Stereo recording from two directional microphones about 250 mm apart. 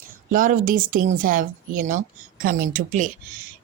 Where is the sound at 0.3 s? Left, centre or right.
Right.